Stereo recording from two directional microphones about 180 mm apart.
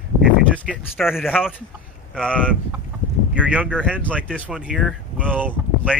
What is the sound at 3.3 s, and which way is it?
Speech, 5° right (ahead or behind).